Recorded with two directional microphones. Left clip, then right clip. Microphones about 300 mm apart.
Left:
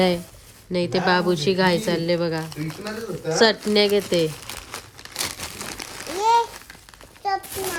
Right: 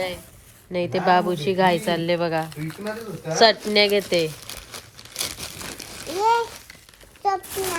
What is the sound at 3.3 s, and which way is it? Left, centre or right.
Crumpling, centre.